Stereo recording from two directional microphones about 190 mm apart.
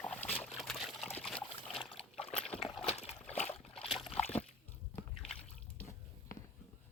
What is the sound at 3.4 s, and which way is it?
Splash, 30° left (ahead or behind).